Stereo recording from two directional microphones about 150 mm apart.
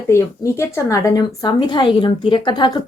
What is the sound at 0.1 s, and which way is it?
A woman's voice, 20° left (ahead or behind).